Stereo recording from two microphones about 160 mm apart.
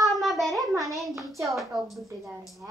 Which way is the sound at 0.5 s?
20° right (ahead or behind).